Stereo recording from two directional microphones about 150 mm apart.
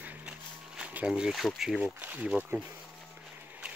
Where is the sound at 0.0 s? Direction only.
10° right (ahead or behind).